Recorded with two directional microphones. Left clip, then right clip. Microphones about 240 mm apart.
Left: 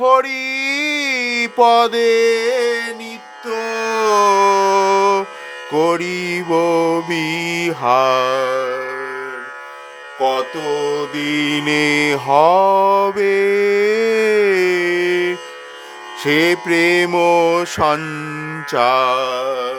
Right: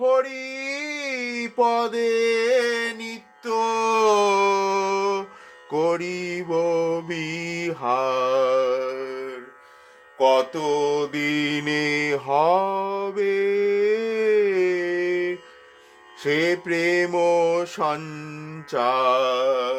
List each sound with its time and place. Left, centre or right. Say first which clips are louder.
0.0 s music: left 7 dB; left
5.7 s mantra: left 6 dB; left
10.2 s mantra: left 1 dB; centre; by 15.4 s left
16.2 s music: left 7 dB; left
18.7 s mantra: left 6 dB; left